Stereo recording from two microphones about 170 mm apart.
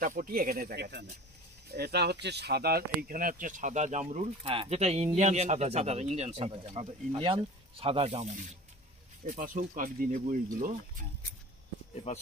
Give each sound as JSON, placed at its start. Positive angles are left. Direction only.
{"t": 0.0, "sound": "speech", "side_deg": -55}
{"t": 9.2, "sound": "speech", "side_deg": -55}
{"t": 11.9, "sound": "speech", "side_deg": 35}